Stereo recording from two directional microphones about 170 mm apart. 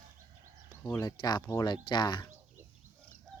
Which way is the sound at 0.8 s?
20° left (ahead or behind).